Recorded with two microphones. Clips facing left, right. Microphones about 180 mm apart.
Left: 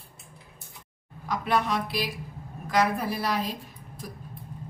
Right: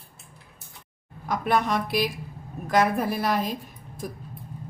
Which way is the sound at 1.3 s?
50° right (ahead or behind).